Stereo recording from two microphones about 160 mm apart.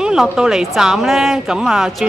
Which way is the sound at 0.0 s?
5° right (ahead or behind).